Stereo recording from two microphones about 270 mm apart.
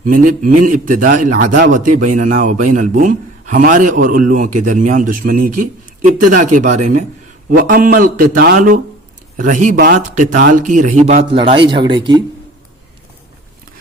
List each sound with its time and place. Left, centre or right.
0.0 s a man's voice: right